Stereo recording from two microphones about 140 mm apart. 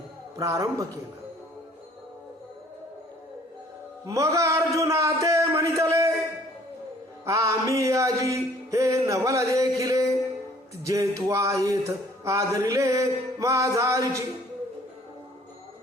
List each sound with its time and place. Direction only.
0.3 s music: 20° right (ahead or behind)
4.0 s a man's voice: 20° right (ahead or behind)
7.3 s music: 20° right (ahead or behind)
10.8 s speech: 20° right (ahead or behind)
11.3 s music: 20° right (ahead or behind)